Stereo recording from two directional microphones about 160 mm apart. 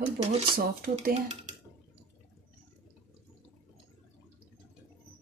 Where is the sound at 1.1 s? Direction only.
45° right (ahead or behind).